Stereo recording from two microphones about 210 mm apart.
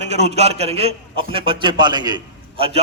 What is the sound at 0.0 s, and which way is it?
A man's voice, 30° right (ahead or behind).